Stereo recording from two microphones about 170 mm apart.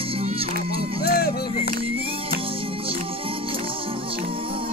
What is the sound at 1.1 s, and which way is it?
Music, 65° left (ahead or behind).